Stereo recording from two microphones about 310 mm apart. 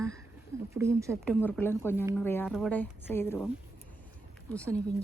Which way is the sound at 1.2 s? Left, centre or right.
Centre.